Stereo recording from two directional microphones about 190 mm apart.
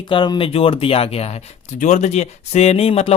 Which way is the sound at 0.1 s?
25° left (ahead or behind).